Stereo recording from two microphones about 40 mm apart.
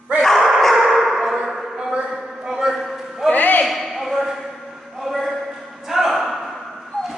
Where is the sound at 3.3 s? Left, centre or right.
Left.